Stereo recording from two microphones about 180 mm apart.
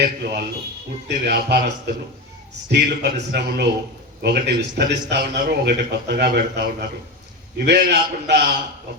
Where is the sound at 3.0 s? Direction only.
70° right (ahead or behind).